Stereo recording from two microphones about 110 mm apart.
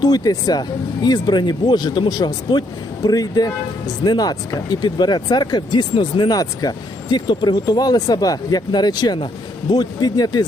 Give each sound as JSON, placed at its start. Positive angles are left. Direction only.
{"t": 0.0, "sound": "speech", "side_deg": 35}